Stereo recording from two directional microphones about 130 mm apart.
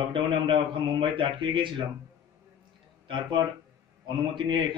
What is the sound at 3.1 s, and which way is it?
A man's voice, 35° right (ahead or behind).